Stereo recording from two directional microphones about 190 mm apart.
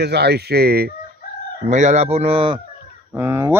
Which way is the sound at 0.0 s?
60° right (ahead or behind).